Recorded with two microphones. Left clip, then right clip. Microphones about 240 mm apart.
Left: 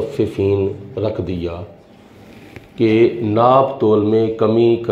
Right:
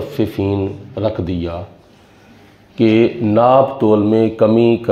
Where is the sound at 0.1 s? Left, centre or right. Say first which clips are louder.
Even; right.